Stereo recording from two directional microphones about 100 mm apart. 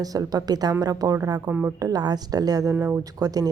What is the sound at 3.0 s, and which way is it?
Speech, 40° right (ahead or behind).